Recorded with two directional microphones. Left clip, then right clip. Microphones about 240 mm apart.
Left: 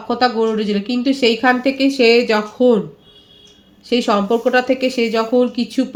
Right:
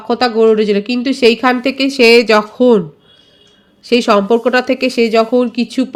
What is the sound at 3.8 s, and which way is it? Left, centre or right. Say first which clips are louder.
Speech: right 5 dB; right.